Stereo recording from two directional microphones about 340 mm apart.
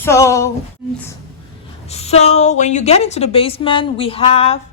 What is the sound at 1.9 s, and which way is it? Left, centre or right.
A woman's voice, centre.